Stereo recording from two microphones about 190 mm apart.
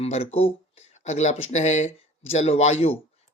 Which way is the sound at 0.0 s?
30° left (ahead or behind).